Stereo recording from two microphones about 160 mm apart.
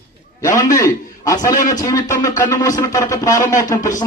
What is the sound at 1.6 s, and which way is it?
Speech, 55° left (ahead or behind).